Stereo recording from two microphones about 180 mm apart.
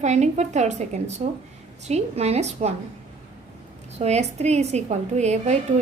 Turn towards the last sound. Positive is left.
turn(degrees=-40)  # may be behind; listen again after turning